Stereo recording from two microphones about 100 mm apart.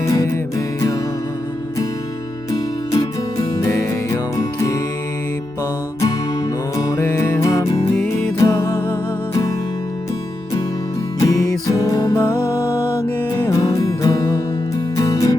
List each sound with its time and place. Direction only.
0.0 s music: 30° left (ahead or behind)
2.5 s music: 40° left (ahead or behind)
6.7 s music: 35° left (ahead or behind)
11.2 s music: 35° left (ahead or behind)
12.1 s music: 25° left (ahead or behind)
14.0 s music: 40° left (ahead or behind)